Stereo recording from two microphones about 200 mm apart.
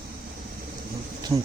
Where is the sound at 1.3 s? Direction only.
15° right (ahead or behind).